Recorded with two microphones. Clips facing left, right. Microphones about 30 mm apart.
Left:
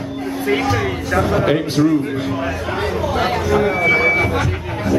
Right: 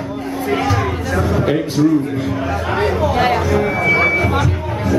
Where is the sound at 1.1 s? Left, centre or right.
Left.